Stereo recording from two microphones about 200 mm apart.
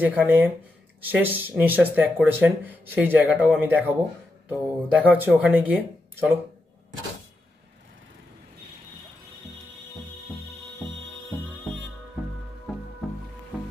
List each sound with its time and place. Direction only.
0.0 s speech: 10° right (ahead or behind)